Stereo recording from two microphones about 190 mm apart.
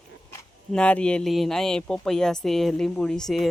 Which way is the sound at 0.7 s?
5° left (ahead or behind).